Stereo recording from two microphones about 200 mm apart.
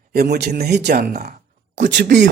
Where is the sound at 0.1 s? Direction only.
50° right (ahead or behind).